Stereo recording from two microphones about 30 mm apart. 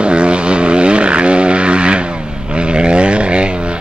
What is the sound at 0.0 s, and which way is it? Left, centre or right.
Vehicle, right.